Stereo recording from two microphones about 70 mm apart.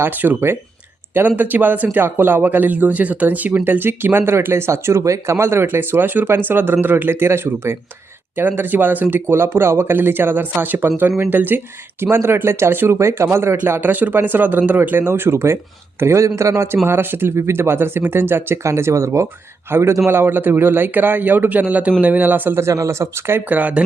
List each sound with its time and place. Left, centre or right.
0.0 s a man's voice: right
16.8 s a man's voice: right
22.5 s speech: right
23.5 s speech: right